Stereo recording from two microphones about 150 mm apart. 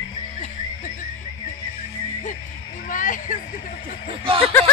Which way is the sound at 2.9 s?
60° left (ahead or behind).